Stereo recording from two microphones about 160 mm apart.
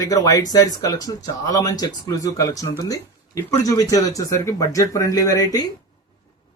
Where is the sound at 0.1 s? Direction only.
25° left (ahead or behind).